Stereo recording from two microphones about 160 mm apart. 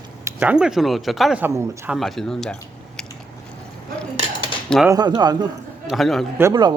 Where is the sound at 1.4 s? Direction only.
15° right (ahead or behind).